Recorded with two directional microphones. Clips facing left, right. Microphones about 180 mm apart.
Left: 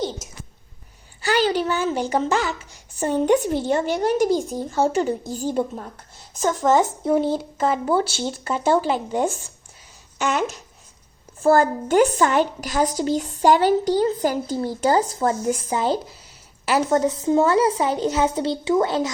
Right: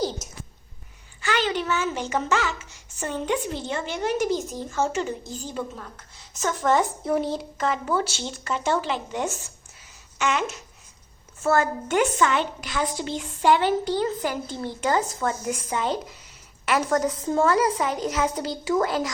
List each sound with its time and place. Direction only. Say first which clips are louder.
1.2 s a woman's voice: left 5 dB; 35° left (ahead or behind)
6.6 s speech: left 3 dB; centre (ahead or behind)
7.7 s a woman's voice: left 4 dB; 30° left (ahead or behind)